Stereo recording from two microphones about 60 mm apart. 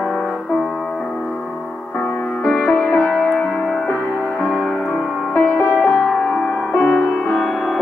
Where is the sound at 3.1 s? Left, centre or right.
Centre.